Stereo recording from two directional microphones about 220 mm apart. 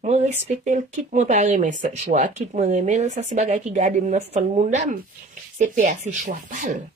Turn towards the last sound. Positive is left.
turn(degrees=-35)  # may be behind; listen again after turning